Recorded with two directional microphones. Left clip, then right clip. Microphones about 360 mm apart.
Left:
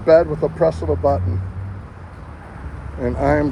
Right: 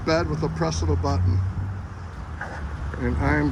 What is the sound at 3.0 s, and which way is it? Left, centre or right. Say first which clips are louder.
Speech: left 7 dB; centre.